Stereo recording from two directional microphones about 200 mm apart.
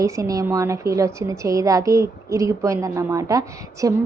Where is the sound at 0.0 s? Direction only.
15° right (ahead or behind).